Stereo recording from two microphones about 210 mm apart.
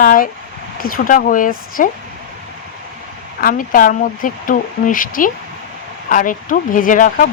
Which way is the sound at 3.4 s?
40° left (ahead or behind).